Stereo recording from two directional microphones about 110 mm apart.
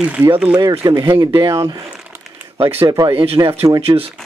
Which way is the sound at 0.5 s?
35° right (ahead or behind).